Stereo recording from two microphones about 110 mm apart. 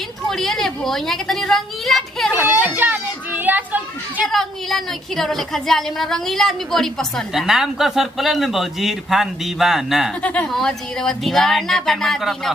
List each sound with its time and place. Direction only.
0.3 s a woman's voice: 5° left (ahead or behind)
2.3 s a child's voice: 20° right (ahead or behind)
4.3 s a woman's voice: centre (ahead or behind)
10.2 s a woman's voice: 15° left (ahead or behind)